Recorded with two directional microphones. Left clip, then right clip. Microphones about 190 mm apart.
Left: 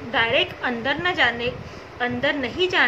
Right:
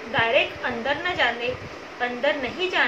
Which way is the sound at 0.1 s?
60° left (ahead or behind).